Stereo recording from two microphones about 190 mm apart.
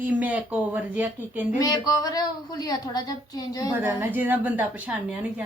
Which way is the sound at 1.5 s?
20° left (ahead or behind).